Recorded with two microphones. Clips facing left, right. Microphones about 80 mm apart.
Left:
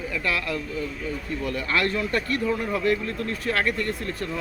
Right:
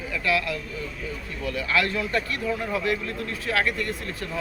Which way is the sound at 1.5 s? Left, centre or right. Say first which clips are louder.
Right 1 dB; left.